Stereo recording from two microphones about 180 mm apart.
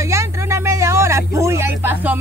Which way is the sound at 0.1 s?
15° right (ahead or behind).